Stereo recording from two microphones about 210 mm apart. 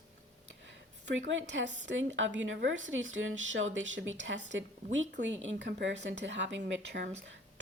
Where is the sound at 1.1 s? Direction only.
65° right (ahead or behind).